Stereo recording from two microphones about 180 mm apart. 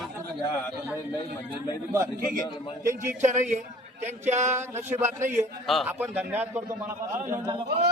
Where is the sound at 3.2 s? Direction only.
40° right (ahead or behind).